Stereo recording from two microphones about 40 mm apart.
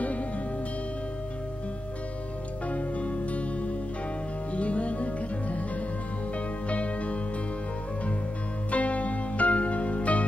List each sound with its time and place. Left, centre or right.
2.7 s music: left
6.7 s music: left
8.6 s music: left